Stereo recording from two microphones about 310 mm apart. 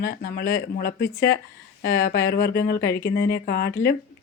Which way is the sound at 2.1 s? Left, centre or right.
Left.